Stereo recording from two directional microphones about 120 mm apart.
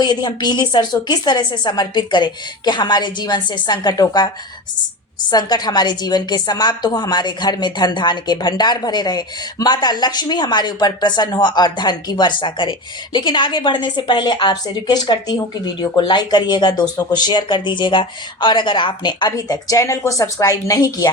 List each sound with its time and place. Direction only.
0.0 s a woman's voice: 35° left (ahead or behind)
5.3 s a woman's voice: 35° left (ahead or behind)